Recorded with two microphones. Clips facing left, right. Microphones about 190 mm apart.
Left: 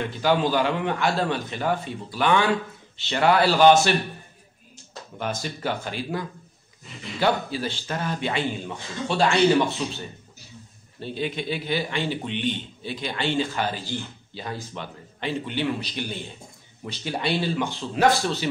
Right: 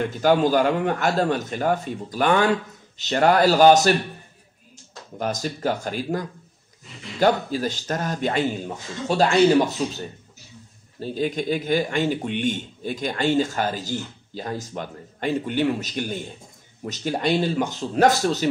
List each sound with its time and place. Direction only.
0.0 s speech: 45° right (ahead or behind)
5.1 s speech: 40° right (ahead or behind)